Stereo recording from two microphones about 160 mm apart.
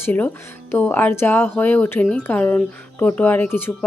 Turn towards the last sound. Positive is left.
turn(degrees=15)  # may be behind; listen again after turning